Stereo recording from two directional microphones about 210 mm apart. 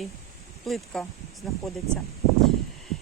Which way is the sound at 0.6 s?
Centre (ahead or behind).